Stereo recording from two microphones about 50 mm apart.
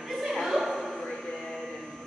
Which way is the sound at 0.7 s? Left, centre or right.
Centre.